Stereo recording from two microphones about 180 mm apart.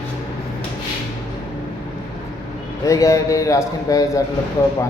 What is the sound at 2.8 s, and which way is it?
A man's voice, 20° left (ahead or behind).